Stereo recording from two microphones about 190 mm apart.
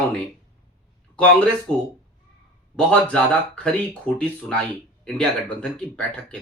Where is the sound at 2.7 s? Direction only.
5° left (ahead or behind).